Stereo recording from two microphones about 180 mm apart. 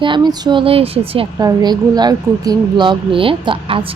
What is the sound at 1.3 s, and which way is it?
Speech, 20° right (ahead or behind).